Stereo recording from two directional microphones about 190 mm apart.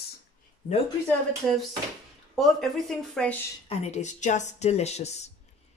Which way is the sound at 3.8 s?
35° left (ahead or behind).